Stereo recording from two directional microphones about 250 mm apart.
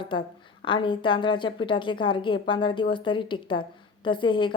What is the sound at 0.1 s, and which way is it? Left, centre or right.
A woman's voice, centre.